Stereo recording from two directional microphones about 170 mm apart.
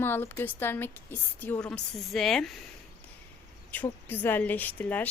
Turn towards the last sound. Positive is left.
turn(degrees=10)  # may be behind; listen again after turning